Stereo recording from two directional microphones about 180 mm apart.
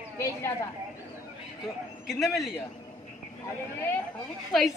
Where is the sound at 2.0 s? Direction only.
Centre (ahead or behind).